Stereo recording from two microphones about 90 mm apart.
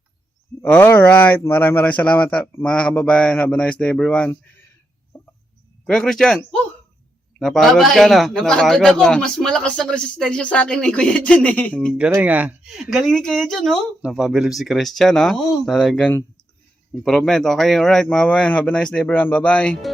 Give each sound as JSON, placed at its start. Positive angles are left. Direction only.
{"t": 0.6, "sound": "a man's voice", "side_deg": 25}
{"t": 5.1, "sound": "a sound", "side_deg": 20}
{"t": 5.8, "sound": "a man's voice", "side_deg": 5}
{"t": 11.9, "sound": "speech", "side_deg": -10}
{"t": 12.7, "sound": "speech", "side_deg": -5}
{"t": 14.0, "sound": "a man's voice", "side_deg": -10}